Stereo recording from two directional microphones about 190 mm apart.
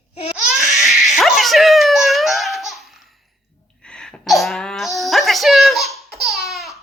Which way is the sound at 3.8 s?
5° left (ahead or behind).